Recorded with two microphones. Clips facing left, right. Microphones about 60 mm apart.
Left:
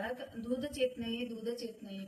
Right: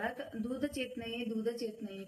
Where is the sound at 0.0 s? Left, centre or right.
Right.